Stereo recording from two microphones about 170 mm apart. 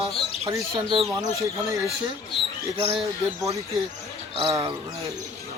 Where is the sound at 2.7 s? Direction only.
35° right (ahead or behind).